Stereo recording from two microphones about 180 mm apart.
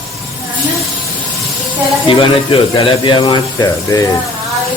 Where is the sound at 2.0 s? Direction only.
25° left (ahead or behind).